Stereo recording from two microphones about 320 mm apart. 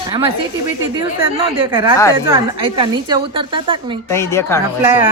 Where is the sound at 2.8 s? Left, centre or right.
Centre.